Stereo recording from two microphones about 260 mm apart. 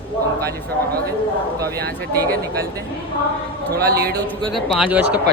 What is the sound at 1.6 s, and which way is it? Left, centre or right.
Speech, right.